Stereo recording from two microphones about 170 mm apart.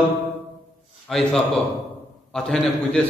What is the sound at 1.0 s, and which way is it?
A man's voice, centre (ahead or behind).